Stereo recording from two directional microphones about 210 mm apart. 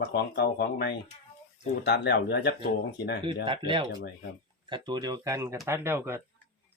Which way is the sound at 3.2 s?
25° right (ahead or behind).